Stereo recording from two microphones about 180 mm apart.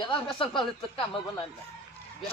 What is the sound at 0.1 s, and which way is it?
Speech, 25° left (ahead or behind).